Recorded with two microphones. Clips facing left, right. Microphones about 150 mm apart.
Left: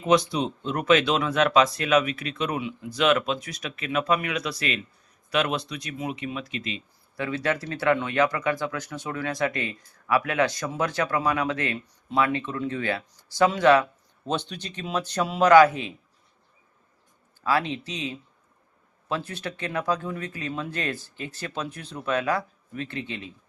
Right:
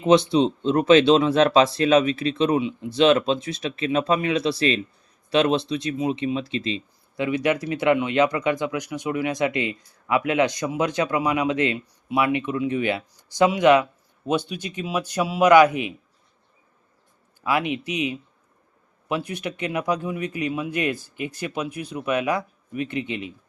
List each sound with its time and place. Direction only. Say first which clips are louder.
0.0 s speech: right 5 dB; 25° right (ahead or behind)
7.3 s speech: right 5 dB; 15° right (ahead or behind)
17.4 s speech: right 2 dB; 15° right (ahead or behind)